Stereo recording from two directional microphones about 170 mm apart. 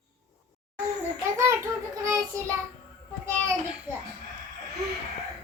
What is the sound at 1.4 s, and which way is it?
Speech, 15° right (ahead or behind).